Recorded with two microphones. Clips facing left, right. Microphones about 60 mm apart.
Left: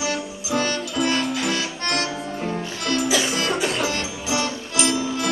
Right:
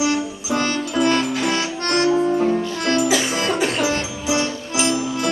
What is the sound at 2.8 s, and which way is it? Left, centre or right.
Music, right.